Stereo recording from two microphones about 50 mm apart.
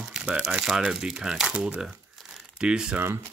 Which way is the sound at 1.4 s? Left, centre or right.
Right.